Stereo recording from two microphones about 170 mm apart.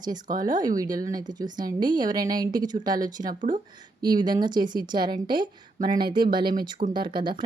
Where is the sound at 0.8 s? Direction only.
20° right (ahead or behind).